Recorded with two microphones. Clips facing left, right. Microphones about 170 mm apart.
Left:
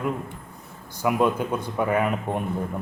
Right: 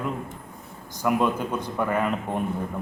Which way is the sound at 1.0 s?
10° left (ahead or behind).